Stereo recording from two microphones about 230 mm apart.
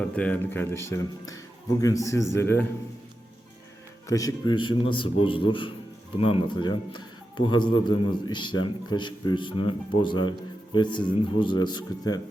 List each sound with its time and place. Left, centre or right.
0.2 s speech: centre
4.1 s speech: centre